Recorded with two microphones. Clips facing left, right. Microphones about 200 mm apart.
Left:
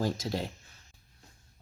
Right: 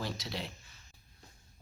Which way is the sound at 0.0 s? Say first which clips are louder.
Left 8 dB; 45° left (ahead or behind).